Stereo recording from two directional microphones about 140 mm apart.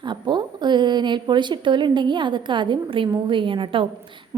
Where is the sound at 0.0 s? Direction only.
35° right (ahead or behind).